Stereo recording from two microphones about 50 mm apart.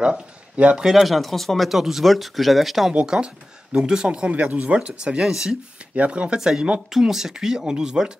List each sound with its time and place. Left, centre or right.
0.6 s speech: right
0.8 s speech: centre
2.9 s speech: right
5.2 s speech: centre
5.9 s speech: right